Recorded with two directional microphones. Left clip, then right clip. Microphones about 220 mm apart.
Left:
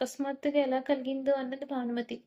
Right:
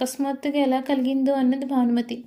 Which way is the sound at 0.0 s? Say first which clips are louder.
Right 6 dB; 45° right (ahead or behind).